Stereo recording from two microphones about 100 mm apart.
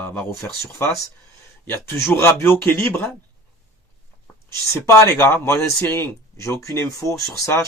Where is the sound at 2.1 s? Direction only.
25° left (ahead or behind).